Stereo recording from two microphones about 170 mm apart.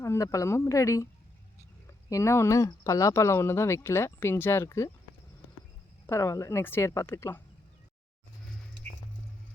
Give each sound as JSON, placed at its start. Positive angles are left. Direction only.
{"t": 0.0, "sound": "speech", "side_deg": 20}
{"t": 2.0, "sound": "speech", "side_deg": 15}
{"t": 6.1, "sound": "speech", "side_deg": 15}